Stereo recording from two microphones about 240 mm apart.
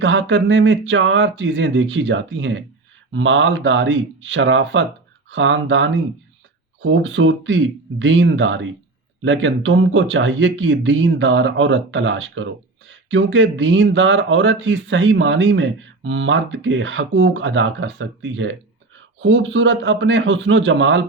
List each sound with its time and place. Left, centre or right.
0.0 s speech: right